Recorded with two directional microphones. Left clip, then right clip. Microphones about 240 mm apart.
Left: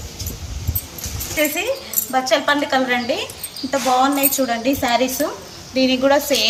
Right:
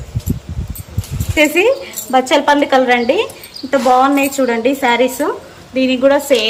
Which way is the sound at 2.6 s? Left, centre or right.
Centre.